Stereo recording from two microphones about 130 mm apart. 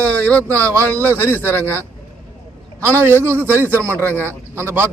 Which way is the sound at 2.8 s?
20° right (ahead or behind).